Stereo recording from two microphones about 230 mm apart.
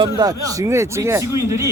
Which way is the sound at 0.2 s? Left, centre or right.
Centre.